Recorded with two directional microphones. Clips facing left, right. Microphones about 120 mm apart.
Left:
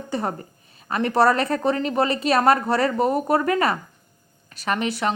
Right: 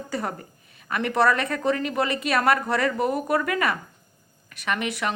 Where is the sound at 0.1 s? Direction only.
30° left (ahead or behind).